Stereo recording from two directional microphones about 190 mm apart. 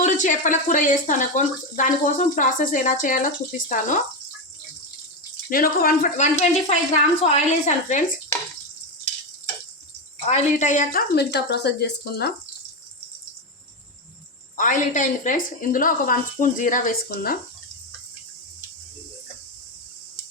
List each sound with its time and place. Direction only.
0.0 s speech: 40° left (ahead or behind)
5.5 s a woman's voice: 50° left (ahead or behind)
10.2 s speech: 40° left (ahead or behind)
11.1 s speech: 60° left (ahead or behind)
14.5 s a woman's voice: 45° left (ahead or behind)